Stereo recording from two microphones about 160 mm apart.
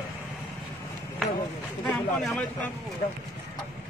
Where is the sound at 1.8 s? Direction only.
5° left (ahead or behind).